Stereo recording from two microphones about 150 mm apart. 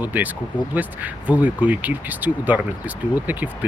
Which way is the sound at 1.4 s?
10° right (ahead or behind).